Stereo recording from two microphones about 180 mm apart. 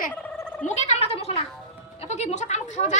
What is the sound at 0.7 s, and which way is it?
Speech, 40° left (ahead or behind).